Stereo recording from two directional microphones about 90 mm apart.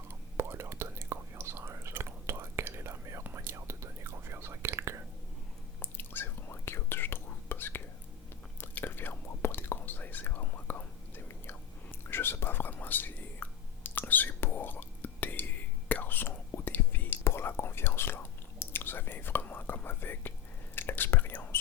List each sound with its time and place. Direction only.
0.1 s whispering: 25° right (ahead or behind)
5.8 s whispering: 20° left (ahead or behind)